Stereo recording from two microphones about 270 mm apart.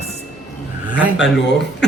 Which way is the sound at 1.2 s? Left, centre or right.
Left.